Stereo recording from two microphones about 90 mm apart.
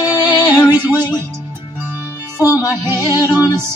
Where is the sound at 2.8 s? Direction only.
25° right (ahead or behind).